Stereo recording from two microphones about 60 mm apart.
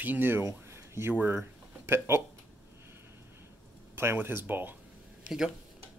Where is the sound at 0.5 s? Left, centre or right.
Right.